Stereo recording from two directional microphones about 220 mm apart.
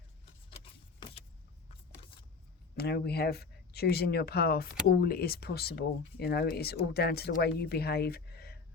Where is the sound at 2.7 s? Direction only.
45° left (ahead or behind).